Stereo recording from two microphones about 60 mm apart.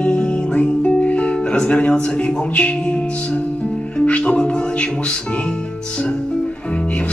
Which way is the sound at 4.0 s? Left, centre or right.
Left.